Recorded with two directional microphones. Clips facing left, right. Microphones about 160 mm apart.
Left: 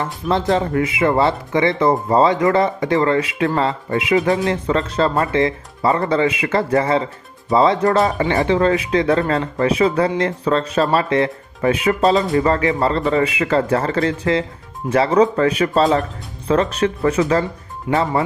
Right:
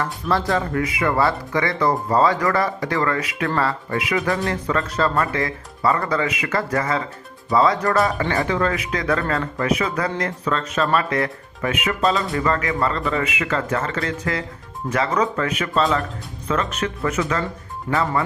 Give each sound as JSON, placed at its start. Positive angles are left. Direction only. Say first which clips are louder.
{"t": 0.0, "sound": "speech", "louder": "left 3 dB", "side_deg": 20}